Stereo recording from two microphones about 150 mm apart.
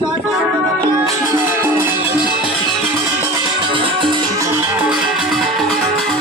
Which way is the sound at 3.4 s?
35° right (ahead or behind).